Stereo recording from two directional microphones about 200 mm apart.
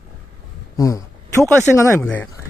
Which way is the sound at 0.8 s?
15° left (ahead or behind).